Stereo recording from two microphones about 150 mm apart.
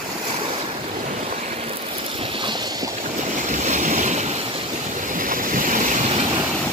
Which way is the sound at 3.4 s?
55° right (ahead or behind).